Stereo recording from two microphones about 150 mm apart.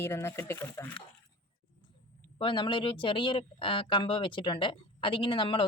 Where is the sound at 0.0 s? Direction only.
15° left (ahead or behind).